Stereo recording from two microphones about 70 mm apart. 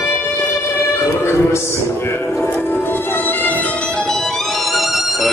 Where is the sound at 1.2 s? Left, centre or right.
Left; by 5.3 s centre.